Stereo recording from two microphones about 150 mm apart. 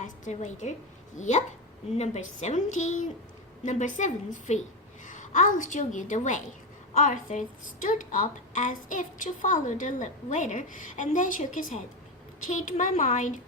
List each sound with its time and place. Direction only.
0.0 s a woman's voice: 55° left (ahead or behind)